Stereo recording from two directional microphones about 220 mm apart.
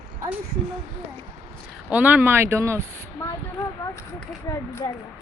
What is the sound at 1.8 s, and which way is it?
Speech, 5° right (ahead or behind).